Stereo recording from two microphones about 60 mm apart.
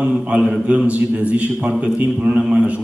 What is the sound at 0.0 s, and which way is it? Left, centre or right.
A man's voice, right.